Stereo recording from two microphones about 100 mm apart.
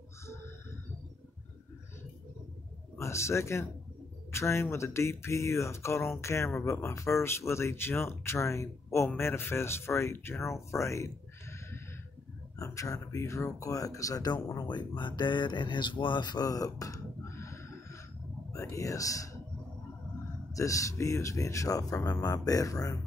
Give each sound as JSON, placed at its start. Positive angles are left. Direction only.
{"t": 3.0, "sound": "speech", "side_deg": 30}
{"t": 20.5, "sound": "speech", "side_deg": 35}